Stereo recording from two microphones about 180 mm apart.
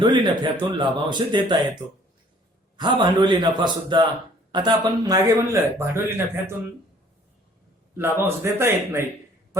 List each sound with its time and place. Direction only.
0.0 s speech: 25° right (ahead or behind)
7.9 s a man's voice: 10° right (ahead or behind)